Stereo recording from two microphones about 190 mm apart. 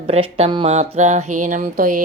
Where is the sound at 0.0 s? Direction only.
30° right (ahead or behind).